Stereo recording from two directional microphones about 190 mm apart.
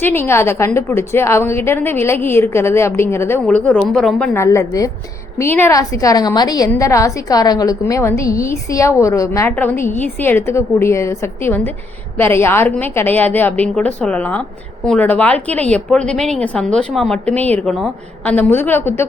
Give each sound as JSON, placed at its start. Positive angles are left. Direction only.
{"t": 0.0, "sound": "a woman's voice", "side_deg": 10}
{"t": 4.4, "sound": "a woman's voice", "side_deg": 15}